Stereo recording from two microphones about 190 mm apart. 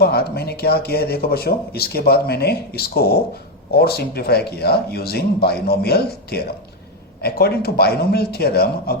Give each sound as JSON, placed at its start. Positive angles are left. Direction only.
{"t": 0.0, "sound": "speech", "side_deg": 55}